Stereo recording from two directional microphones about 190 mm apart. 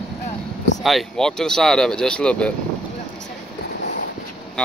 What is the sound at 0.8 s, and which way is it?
Speech, centre (ahead or behind).